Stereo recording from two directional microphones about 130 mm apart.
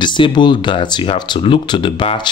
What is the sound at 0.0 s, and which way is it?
Speech, 35° left (ahead or behind).